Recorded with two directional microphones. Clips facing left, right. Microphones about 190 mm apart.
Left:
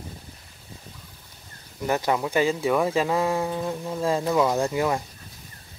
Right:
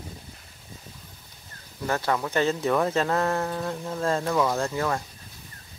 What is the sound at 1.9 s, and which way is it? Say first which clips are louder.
Speech: left 2 dB; 15° left (ahead or behind).